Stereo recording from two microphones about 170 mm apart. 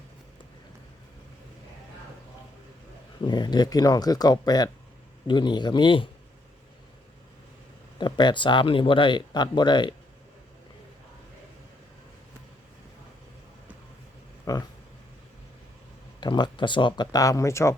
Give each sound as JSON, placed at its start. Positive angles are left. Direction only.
{"t": 3.2, "sound": "speech", "side_deg": 25}
{"t": 7.9, "sound": "speech", "side_deg": 25}
{"t": 14.5, "sound": "a sound", "side_deg": 20}
{"t": 16.2, "sound": "speech", "side_deg": 25}